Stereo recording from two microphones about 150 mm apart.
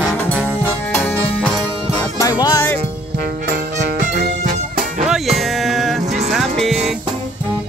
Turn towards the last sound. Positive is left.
turn(degrees=0)  # may be behind; listen again after turning